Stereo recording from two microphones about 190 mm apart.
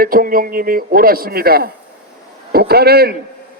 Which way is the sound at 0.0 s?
50° right (ahead or behind).